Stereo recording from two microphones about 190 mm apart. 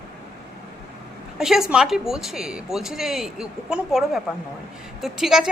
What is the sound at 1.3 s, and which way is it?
A woman's voice, centre (ahead or behind).